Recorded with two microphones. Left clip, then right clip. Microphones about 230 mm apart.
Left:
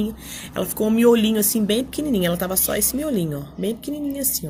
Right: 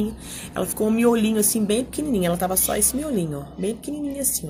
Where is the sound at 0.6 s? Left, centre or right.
Left.